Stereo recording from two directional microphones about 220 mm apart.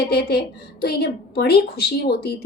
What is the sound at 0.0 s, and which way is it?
A woman's voice, 45° left (ahead or behind).